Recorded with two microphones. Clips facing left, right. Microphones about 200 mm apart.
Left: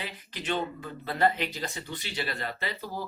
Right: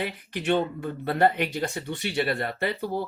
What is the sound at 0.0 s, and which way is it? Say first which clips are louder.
Speech: right 8 dB; 60° right (ahead or behind).